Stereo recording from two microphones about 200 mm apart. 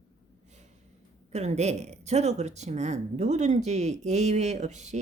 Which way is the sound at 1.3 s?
35° right (ahead or behind).